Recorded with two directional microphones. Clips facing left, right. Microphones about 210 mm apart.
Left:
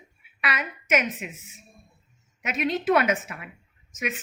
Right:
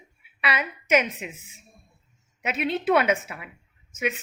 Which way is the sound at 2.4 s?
30° right (ahead or behind).